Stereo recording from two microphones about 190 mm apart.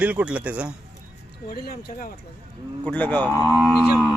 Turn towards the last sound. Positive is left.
turn(degrees=0)  # may be behind; listen again after turning